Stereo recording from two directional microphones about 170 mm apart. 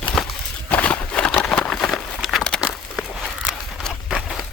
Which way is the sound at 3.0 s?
Centre (ahead or behind).